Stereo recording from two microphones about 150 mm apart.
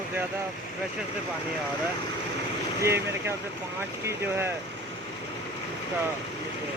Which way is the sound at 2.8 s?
15° right (ahead or behind).